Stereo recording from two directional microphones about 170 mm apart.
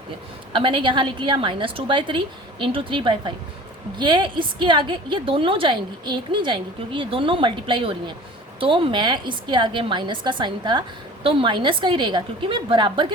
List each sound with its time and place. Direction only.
0.5 s a woman's voice: 30° right (ahead or behind)